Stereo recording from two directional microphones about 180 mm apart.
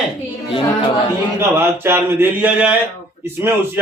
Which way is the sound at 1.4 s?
15° right (ahead or behind).